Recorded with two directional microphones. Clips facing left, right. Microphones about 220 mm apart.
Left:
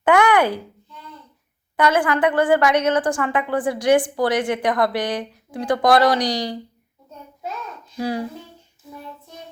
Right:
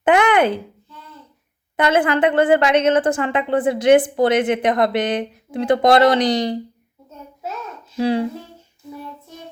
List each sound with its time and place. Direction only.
0.0 s a sound: 20° right (ahead or behind)
1.7 s a woman's voice: 25° right (ahead or behind)
7.9 s a woman's voice: 25° right (ahead or behind)